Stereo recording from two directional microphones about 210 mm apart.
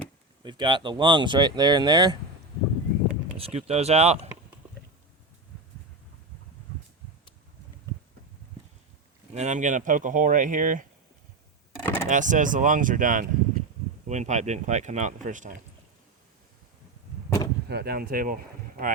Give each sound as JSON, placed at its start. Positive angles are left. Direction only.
{"t": 0.4, "sound": "speech", "side_deg": -20}
{"t": 3.3, "sound": "speech", "side_deg": -30}
{"t": 9.3, "sound": "speech", "side_deg": -35}
{"t": 11.8, "sound": "a sound", "side_deg": 10}
{"t": 12.0, "sound": "speech", "side_deg": -35}
{"t": 17.2, "sound": "arrow", "side_deg": 15}
{"t": 17.7, "sound": "speech", "side_deg": -50}